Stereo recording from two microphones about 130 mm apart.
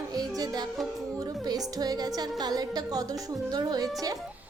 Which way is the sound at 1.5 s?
30° right (ahead or behind).